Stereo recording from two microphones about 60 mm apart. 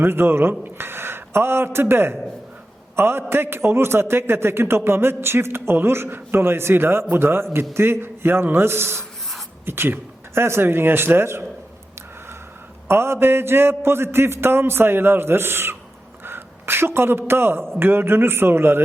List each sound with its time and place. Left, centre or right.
0.0 s a man's voice: right
12.9 s a man's voice: right